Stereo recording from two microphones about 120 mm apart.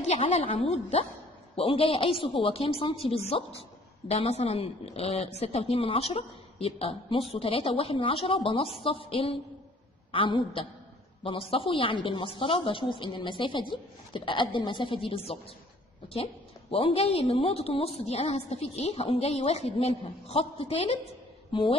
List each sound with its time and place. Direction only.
0.2 s a woman's voice: 50° left (ahead or behind)
16.7 s a woman's voice: 55° left (ahead or behind)